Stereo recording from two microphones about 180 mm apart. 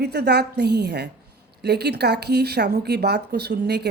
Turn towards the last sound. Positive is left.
turn(degrees=-65)  # may be behind; listen again after turning